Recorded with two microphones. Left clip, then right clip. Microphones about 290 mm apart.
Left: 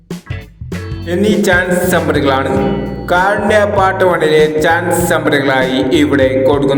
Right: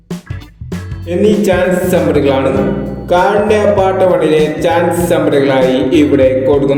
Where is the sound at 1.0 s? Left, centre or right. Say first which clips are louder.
Right 2 dB; left.